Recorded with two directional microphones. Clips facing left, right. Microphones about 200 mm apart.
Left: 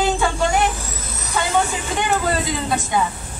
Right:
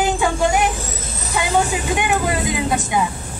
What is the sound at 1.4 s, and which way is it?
Speech, 15° right (ahead or behind).